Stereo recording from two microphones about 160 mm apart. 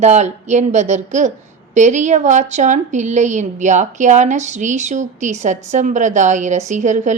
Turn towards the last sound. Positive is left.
turn(degrees=-50)  # may be behind; listen again after turning